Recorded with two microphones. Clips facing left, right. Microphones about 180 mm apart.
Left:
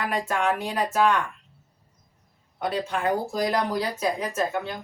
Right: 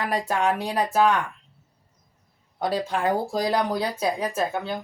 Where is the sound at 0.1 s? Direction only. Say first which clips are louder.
Right 2 dB; 35° right (ahead or behind).